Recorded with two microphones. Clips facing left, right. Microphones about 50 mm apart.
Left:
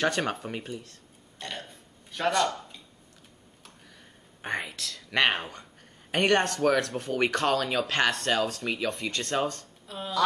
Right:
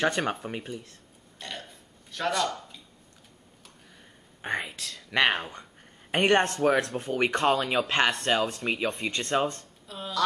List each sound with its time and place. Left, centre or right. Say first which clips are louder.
0.2 s speech: right 1 dB; centre
1.4 s burping: left 1 dB; centre
4.4 s whispering: right 1 dB; centre
4.6 s speech: left 1 dB; right
5.1 s speech: right 1 dB; centre
6.1 s speech: right 1 dB; centre
7.0 s speech: right 1 dB; centre
9.8 s speech: left 2 dB; centre